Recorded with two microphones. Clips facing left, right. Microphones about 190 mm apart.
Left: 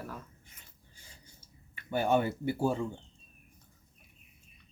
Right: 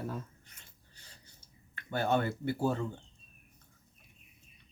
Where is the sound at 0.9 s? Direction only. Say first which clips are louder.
Left 3 dB; 10° left (ahead or behind).